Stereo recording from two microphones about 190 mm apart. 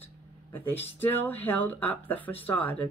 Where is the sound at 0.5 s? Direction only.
10° left (ahead or behind).